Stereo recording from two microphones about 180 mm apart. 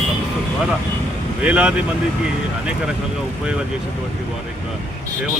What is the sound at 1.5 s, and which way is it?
Speech, 5° right (ahead or behind).